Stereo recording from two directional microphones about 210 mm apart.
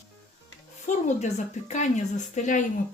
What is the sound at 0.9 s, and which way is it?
A woman's voice, 35° left (ahead or behind).